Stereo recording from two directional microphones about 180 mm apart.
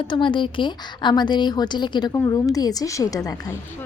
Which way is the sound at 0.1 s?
25° left (ahead or behind).